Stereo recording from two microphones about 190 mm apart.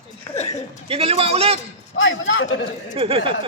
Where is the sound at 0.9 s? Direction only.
30° right (ahead or behind).